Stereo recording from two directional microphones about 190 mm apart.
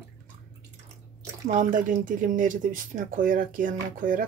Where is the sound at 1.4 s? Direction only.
40° right (ahead or behind).